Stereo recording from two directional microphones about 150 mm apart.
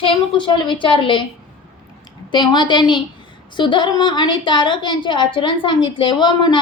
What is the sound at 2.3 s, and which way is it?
A woman's voice, 30° left (ahead or behind).